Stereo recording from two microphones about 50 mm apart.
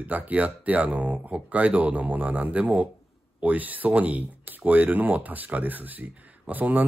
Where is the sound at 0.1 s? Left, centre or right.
Right.